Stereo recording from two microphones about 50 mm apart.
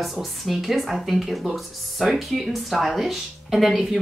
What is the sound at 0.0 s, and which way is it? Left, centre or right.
A woman's voice, centre.